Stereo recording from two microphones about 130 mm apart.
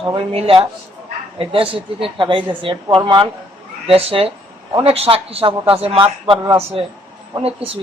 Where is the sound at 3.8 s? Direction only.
45° right (ahead or behind).